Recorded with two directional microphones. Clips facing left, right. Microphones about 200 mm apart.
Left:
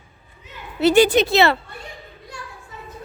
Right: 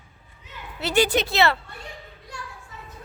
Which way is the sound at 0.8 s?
15° left (ahead or behind).